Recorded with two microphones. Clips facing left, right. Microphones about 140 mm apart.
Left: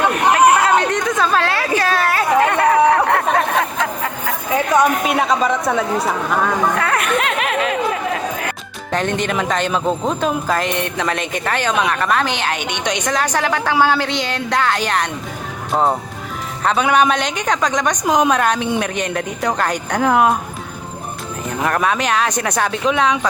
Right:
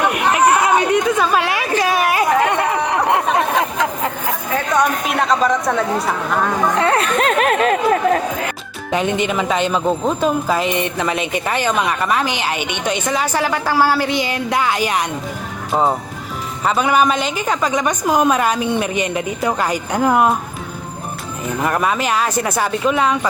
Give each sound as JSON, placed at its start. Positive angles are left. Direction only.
{"t": 0.3, "sound": "chatter", "side_deg": -10}
{"t": 1.8, "sound": "a sound", "side_deg": -15}
{"t": 4.5, "sound": "speech", "side_deg": 10}
{"t": 6.7, "sound": "chatter", "side_deg": -30}
{"t": 8.9, "sound": "speech", "side_deg": -10}
{"t": 21.6, "sound": "speech", "side_deg": -5}